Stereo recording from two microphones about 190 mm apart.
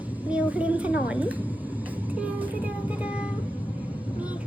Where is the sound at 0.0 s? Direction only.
10° right (ahead or behind).